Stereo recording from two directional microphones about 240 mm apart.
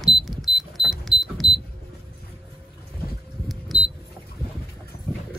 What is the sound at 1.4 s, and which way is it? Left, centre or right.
Cash register, centre.